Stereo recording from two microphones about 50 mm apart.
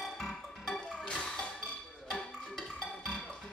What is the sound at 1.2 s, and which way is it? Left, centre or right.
Wood block, centre.